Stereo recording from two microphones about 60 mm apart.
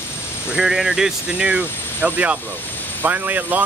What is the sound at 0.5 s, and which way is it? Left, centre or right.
Speech, centre.